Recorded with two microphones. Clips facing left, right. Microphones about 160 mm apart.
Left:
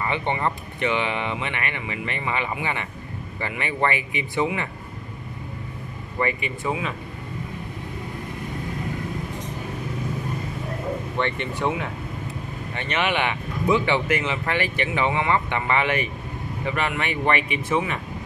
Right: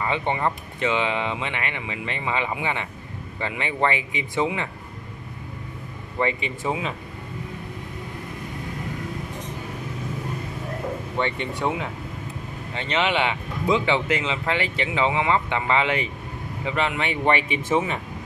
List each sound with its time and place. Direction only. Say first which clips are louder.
0.0 s speech: right 1 dB; 15° right (ahead or behind)
6.1 s speech: right 1 dB; 20° right (ahead or behind)
11.6 s speech: left 1 dB; 5° right (ahead or behind)
12.7 s speech: right 1 dB; 20° right (ahead or behind)